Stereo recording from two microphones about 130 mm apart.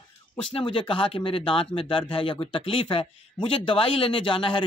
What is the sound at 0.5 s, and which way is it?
Speech, 40° left (ahead or behind).